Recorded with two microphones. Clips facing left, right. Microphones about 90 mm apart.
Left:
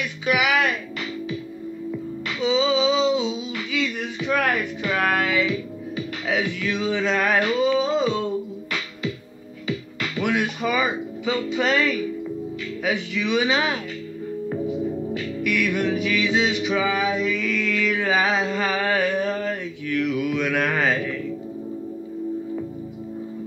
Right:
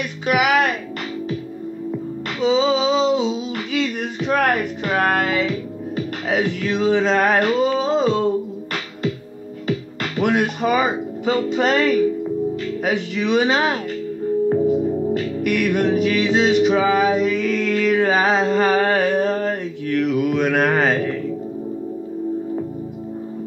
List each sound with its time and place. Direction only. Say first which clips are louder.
0.0 s music: right 4 dB; 40° right (ahead or behind)
2.4 s a sound: right 3 dB; 40° right (ahead or behind)
9.7 s speech: right 4 dB; 40° right (ahead or behind)
14.5 s music: right 5 dB; 35° right (ahead or behind)